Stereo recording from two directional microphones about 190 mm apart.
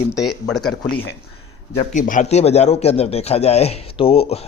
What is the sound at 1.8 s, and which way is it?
A man's voice, 45° left (ahead or behind).